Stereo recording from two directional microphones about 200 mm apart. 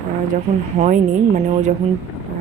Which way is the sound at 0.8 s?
35° right (ahead or behind).